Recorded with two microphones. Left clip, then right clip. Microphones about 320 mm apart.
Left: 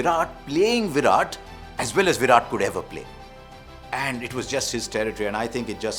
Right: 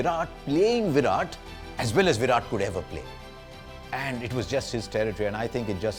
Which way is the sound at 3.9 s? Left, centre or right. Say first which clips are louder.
Left 4 dB; right.